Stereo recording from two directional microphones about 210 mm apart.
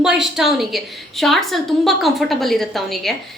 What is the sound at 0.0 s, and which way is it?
A woman's voice, 5° right (ahead or behind).